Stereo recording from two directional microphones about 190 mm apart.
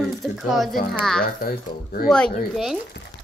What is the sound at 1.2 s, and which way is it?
Speech, 50° left (ahead or behind).